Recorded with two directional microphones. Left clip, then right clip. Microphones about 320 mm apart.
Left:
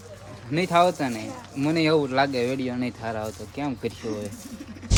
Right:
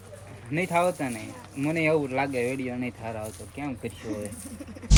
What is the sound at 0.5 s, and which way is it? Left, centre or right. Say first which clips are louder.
Speech: left 4 dB; centre.